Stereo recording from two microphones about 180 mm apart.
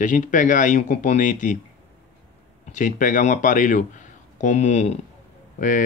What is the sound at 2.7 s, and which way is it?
Speech, 45° left (ahead or behind).